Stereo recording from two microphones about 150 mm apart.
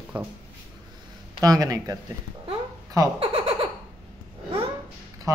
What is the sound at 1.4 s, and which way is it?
Speech, 25° right (ahead or behind).